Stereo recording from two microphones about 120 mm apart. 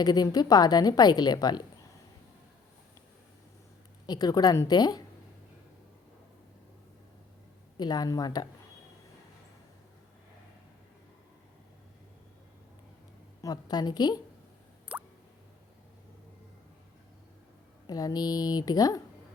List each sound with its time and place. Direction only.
0.0 s a woman's voice: 35° left (ahead or behind)
4.0 s a woman's voice: 35° left (ahead or behind)
7.8 s a woman's voice: 35° left (ahead or behind)
13.4 s a woman's voice: 35° left (ahead or behind)
14.9 s music: 10° right (ahead or behind)
17.8 s a woman's voice: 35° left (ahead or behind)